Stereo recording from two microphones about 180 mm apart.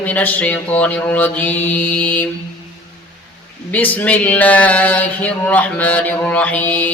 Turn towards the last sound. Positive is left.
turn(degrees=10)  # may be behind; listen again after turning